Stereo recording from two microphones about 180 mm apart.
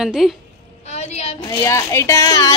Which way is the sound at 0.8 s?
35° left (ahead or behind).